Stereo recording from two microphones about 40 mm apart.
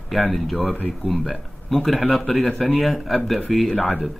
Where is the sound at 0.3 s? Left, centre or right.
Centre.